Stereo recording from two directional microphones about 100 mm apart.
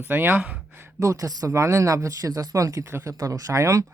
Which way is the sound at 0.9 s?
35° right (ahead or behind).